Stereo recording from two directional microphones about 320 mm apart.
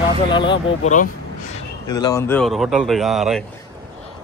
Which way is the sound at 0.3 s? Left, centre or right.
Centre.